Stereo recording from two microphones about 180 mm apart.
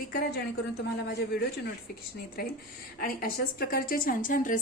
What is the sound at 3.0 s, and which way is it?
A woman's voice, 55° left (ahead or behind).